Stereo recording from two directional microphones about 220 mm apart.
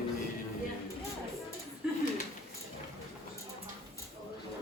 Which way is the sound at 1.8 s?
5° right (ahead or behind).